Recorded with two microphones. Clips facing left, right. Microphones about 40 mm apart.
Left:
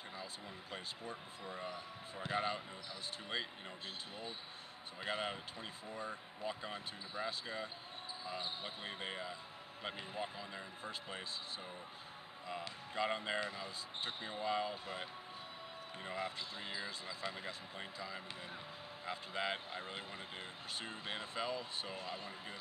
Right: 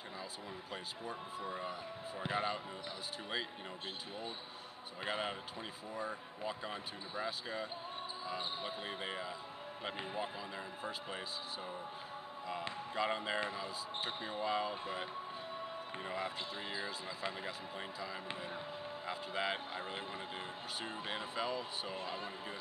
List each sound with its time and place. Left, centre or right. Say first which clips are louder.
0.2 s speech: right 3 dB; centre
5.0 s speech: right 1 dB; centre
12.9 s speech: right 1 dB; centre
21.9 s speech: right 3 dB; right